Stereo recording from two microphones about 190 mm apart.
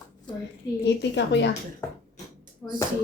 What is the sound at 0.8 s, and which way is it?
Speech, 65° left (ahead or behind).